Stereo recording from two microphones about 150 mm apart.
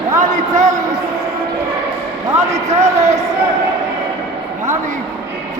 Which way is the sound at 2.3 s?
50° right (ahead or behind).